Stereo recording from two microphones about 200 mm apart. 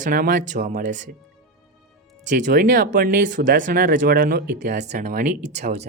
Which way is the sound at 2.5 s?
40° right (ahead or behind).